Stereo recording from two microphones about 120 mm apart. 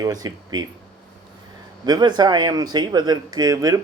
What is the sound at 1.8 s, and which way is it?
Speech, 35° right (ahead or behind).